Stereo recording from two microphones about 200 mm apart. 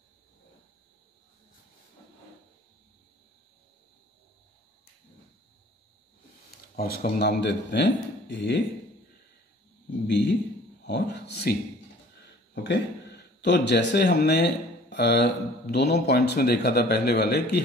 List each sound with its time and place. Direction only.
6.8 s a man's voice: 50° left (ahead or behind)
9.8 s a sound: 60° left (ahead or behind)
10.8 s a man's voice: 55° left (ahead or behind)
12.6 s speech: 60° left (ahead or behind)